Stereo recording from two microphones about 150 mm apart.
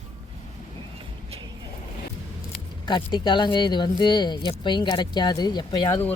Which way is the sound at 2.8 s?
30° left (ahead or behind).